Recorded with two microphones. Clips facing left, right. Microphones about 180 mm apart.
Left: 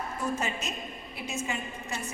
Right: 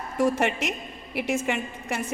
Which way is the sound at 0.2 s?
90° right.